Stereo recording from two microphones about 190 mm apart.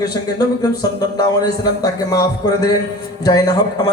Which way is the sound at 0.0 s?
20° left (ahead or behind).